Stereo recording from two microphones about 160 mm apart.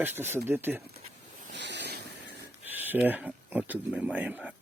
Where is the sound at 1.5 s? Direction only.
90° right.